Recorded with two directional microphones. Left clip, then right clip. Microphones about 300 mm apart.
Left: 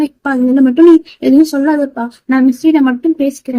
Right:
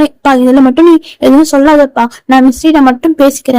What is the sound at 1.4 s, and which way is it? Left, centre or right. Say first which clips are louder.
Speech: right 7 dB; right.